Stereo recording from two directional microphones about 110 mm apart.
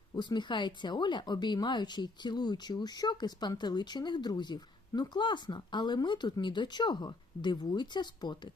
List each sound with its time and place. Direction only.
0.1 s speech: 40° left (ahead or behind)